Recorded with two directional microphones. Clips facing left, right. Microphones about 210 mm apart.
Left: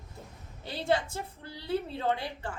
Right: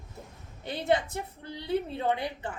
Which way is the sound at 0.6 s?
20° right (ahead or behind).